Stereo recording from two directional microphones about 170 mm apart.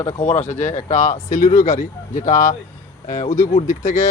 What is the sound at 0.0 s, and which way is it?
Speech, 40° left (ahead or behind).